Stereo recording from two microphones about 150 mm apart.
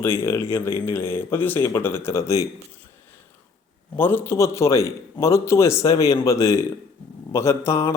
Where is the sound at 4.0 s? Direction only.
15° left (ahead or behind).